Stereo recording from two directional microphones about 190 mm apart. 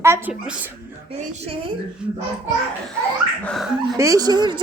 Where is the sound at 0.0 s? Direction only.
10° right (ahead or behind).